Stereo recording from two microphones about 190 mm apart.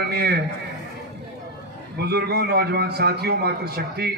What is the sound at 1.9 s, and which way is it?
Speech, 60° right (ahead or behind).